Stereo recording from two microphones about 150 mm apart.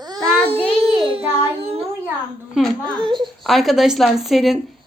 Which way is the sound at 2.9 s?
30° right (ahead or behind).